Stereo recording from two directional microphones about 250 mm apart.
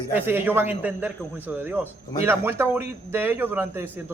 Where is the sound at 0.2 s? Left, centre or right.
Centre.